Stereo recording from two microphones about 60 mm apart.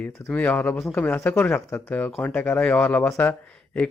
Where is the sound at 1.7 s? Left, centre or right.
Left.